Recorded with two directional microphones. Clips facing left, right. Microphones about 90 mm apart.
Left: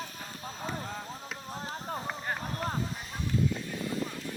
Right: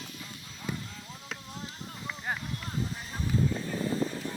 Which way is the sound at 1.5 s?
40° left (ahead or behind).